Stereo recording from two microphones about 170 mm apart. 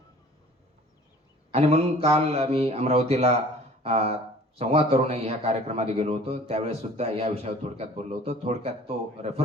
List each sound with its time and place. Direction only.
1.5 s a man's voice: 35° right (ahead or behind)